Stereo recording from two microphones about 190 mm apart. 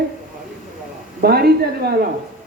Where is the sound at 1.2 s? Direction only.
55° right (ahead or behind).